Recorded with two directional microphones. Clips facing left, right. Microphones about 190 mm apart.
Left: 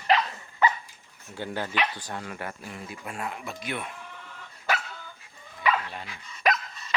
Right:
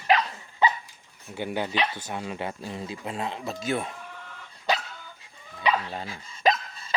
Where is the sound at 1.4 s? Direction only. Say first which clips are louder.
Right 2 dB; 15° right (ahead or behind).